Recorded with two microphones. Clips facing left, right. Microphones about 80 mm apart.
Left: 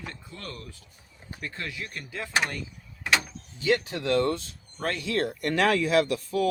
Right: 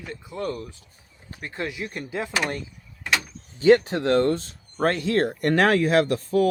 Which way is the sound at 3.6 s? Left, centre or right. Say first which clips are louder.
Right 9 dB; right.